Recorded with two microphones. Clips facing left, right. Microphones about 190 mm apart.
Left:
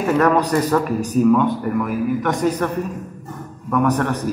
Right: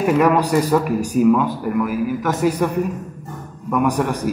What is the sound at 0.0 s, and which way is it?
Speech, 10° right (ahead or behind).